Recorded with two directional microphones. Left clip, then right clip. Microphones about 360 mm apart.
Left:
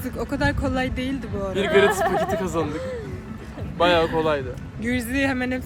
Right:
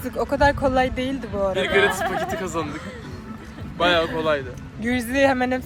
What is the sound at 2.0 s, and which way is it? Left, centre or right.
Speech, left.